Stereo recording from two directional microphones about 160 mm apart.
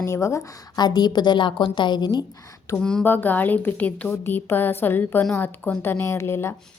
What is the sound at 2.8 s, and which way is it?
Speech, 5° left (ahead or behind).